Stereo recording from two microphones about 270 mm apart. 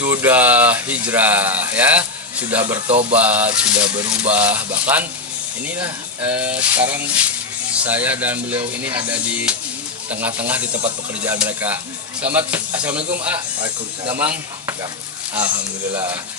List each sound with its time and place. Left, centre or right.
0.0 s speech: centre
16.0 s speech: centre